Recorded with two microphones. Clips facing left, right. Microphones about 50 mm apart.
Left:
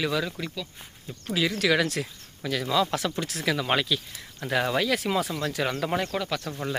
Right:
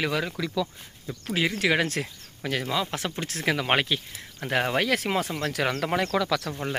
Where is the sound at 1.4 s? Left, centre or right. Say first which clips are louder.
Left 1 dB; right.